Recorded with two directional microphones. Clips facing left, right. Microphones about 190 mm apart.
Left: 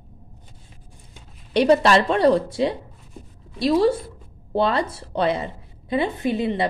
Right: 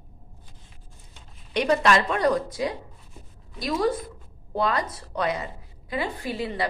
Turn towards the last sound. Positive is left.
turn(degrees=20)  # may be behind; listen again after turning